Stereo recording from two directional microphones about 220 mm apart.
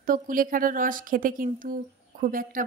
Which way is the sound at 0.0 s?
40° right (ahead or behind).